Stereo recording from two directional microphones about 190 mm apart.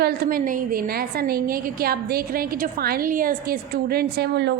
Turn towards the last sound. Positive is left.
turn(degrees=-60)  # may be behind; listen again after turning